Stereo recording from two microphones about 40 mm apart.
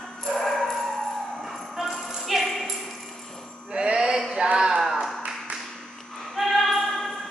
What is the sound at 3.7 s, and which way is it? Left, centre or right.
Music, right.